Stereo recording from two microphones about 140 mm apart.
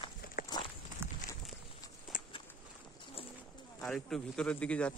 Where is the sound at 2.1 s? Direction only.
70° left (ahead or behind).